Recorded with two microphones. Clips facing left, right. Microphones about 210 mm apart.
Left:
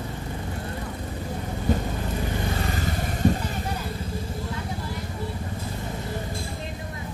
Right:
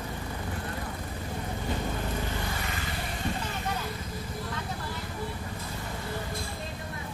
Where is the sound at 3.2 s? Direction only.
45° left (ahead or behind).